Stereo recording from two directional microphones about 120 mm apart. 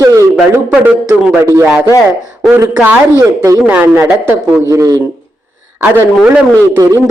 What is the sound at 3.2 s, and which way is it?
Speech, 25° right (ahead or behind).